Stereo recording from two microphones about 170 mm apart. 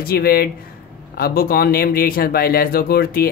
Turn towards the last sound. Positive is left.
turn(degrees=65)  # may be behind; listen again after turning